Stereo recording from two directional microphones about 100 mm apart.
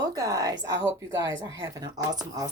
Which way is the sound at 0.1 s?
35° right (ahead or behind).